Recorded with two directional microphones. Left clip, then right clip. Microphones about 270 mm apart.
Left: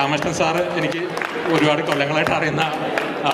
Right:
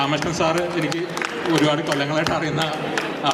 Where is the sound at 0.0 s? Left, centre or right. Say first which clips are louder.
Left 2 dB; right.